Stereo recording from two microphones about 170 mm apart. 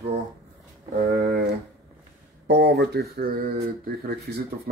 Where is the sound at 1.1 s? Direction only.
65° right (ahead or behind).